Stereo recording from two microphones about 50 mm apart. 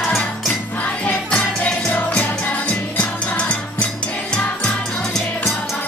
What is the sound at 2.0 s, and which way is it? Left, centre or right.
Music, left.